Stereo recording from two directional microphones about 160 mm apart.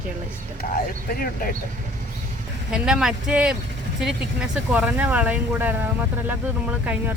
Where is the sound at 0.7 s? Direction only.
65° left (ahead or behind).